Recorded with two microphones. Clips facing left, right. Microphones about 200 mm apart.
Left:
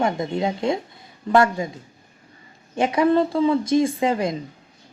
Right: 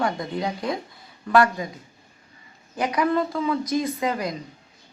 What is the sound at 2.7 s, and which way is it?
Speech, 25° left (ahead or behind).